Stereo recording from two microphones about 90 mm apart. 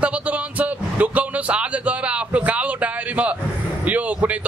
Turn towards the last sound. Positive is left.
turn(degrees=-15)  # may be behind; listen again after turning